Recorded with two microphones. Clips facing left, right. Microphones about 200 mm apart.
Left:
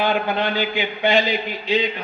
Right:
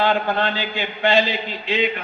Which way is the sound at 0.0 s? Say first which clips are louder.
Right 1 dB; 15° left (ahead or behind).